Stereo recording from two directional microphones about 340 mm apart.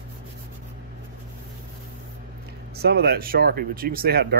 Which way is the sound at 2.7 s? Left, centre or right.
Right.